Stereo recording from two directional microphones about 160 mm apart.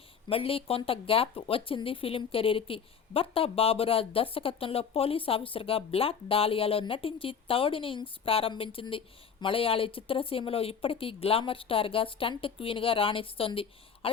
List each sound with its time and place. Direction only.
0.3 s speech: 35° left (ahead or behind)